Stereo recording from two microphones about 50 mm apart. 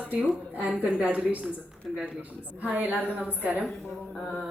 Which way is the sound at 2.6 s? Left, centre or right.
Right.